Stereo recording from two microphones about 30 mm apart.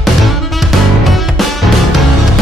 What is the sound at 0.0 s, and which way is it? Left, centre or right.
Music, centre.